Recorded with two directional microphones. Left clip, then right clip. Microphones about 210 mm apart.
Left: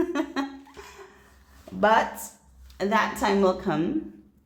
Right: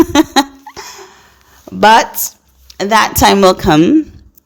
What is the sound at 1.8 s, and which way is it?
A woman's voice, 45° right (ahead or behind).